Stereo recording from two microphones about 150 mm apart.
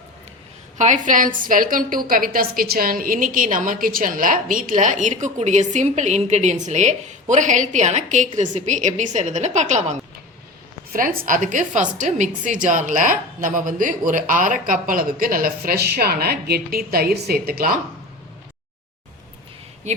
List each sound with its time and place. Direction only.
0.8 s a woman's voice: 55° right (ahead or behind)
10.9 s a woman's voice: 70° right (ahead or behind)